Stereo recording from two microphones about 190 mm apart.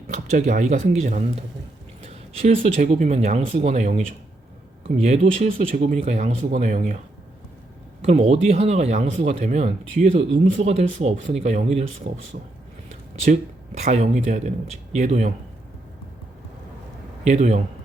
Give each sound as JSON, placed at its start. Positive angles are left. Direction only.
{"t": 0.1, "sound": "speech", "side_deg": -45}
{"t": 2.0, "sound": "a sound", "side_deg": -35}
{"t": 2.7, "sound": "speech", "side_deg": -35}
{"t": 8.0, "sound": "speech", "side_deg": -30}
{"t": 12.3, "sound": "speech", "side_deg": -50}
{"t": 13.2, "sound": "speech", "side_deg": -35}
{"t": 17.2, "sound": "speech", "side_deg": -40}